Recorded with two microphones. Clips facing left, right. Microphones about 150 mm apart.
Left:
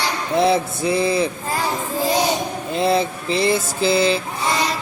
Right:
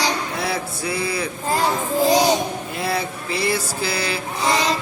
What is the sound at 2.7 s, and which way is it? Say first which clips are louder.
Speech: left 11 dB; 25° left (ahead or behind).